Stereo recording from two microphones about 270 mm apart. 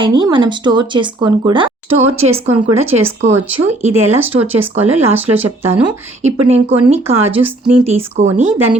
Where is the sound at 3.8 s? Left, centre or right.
Right.